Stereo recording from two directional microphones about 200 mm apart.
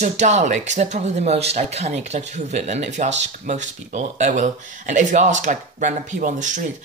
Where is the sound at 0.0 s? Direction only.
35° right (ahead or behind).